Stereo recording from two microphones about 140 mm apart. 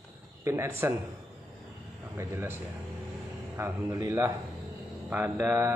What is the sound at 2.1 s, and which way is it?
Speech, 15° right (ahead or behind).